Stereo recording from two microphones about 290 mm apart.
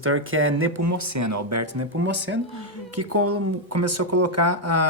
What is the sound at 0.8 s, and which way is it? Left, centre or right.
Speech, right.